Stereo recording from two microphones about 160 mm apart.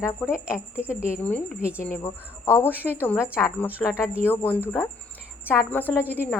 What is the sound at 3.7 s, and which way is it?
Speech, 5° right (ahead or behind).